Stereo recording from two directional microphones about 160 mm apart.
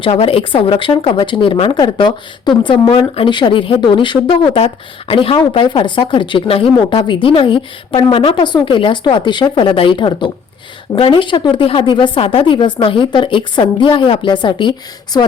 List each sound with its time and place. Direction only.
0.0 s speech: 35° left (ahead or behind)